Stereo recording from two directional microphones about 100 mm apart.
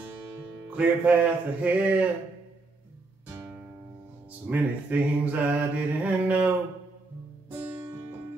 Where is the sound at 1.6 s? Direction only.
15° right (ahead or behind).